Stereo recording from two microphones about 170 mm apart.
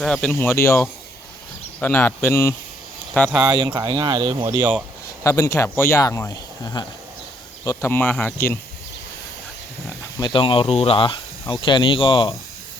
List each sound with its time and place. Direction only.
0.0 s speech: 5° left (ahead or behind)
3.3 s speech: 5° right (ahead or behind)
3.8 s speech: 25° right (ahead or behind)
5.2 s speech: 15° left (ahead or behind)
10.0 s speech: 25° left (ahead or behind)